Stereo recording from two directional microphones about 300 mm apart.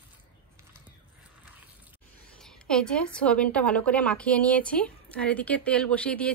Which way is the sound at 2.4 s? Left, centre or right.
Centre.